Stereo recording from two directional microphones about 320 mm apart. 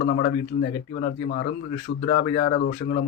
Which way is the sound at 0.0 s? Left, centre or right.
Left.